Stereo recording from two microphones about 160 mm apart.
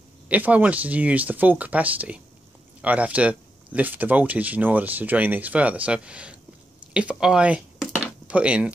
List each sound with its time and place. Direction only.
0.3 s speech: 10° right (ahead or behind)